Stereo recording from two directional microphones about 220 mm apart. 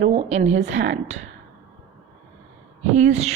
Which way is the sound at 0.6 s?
55° right (ahead or behind).